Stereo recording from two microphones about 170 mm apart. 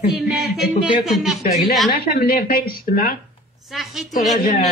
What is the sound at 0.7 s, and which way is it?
A woman's voice, centre (ahead or behind).